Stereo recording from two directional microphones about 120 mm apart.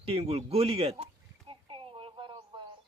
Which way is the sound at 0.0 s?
55° right (ahead or behind).